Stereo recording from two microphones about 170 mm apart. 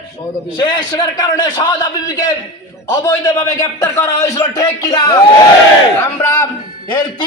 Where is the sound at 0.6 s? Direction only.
25° left (ahead or behind).